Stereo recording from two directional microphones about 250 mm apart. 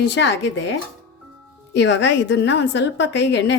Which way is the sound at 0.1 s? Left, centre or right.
Left.